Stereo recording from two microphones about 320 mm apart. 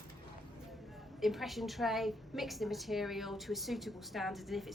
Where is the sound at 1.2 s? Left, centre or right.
Centre.